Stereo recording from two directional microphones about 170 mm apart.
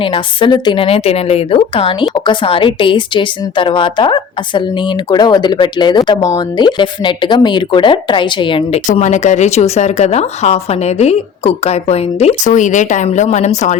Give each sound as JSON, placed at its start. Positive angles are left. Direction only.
{"t": 0.0, "sound": "speech", "side_deg": 30}